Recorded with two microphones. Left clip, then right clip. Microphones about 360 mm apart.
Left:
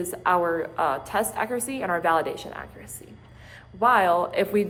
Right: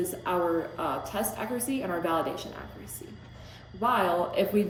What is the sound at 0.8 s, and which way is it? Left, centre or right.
A woman's voice, centre.